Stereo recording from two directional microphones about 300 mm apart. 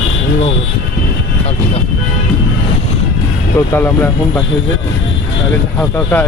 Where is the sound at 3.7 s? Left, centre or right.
Centre.